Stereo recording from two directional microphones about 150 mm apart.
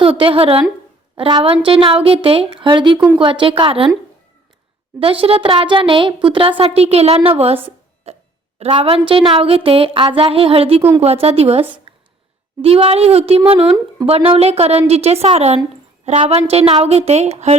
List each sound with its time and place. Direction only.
0.0 s speech: 35° right (ahead or behind)
4.9 s speech: 40° right (ahead or behind)
8.1 s a sound: 45° right (ahead or behind)
8.5 s a woman's voice: 45° right (ahead or behind)
11.9 s a sound: 35° right (ahead or behind)
12.6 s a woman's voice: 40° right (ahead or behind)